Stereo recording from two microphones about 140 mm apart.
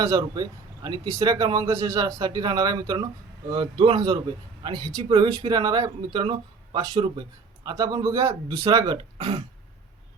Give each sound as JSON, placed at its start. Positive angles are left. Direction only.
{"t": 0.0, "sound": "speech", "side_deg": -25}